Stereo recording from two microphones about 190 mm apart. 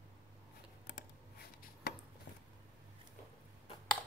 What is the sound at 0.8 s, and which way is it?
Computer keyboard, 60° left (ahead or behind).